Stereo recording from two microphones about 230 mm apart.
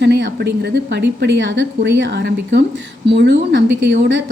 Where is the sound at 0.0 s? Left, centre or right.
Right.